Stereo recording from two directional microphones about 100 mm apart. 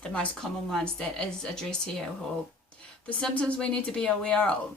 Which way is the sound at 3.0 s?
10° left (ahead or behind).